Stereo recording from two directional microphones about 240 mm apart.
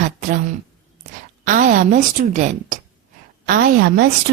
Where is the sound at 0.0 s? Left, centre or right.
Right.